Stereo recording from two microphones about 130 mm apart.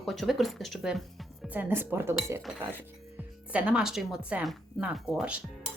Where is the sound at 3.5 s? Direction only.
10° right (ahead or behind).